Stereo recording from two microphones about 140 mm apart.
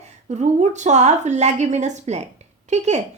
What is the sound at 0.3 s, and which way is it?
A woman's voice, 55° right (ahead or behind).